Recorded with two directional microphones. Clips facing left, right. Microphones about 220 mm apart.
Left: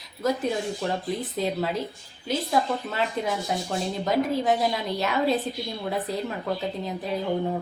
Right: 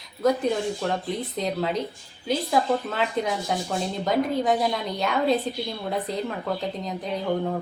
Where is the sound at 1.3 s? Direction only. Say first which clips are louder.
Right 1 dB; 5° left (ahead or behind).